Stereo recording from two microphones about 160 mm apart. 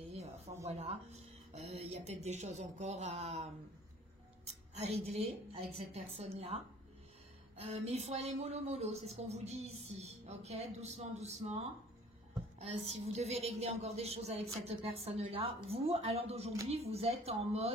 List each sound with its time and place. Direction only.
0.1 s a sound: 45° right (ahead or behind)
0.7 s speech: 40° right (ahead or behind)
4.7 s a woman's voice: 40° right (ahead or behind)
12.5 s a woman's voice: 45° right (ahead or behind)